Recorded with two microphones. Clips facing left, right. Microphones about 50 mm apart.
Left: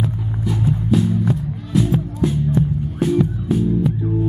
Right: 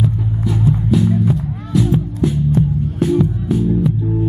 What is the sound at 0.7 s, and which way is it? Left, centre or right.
Music, centre.